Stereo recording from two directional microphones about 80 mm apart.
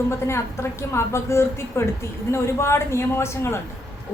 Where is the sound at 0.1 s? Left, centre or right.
Left.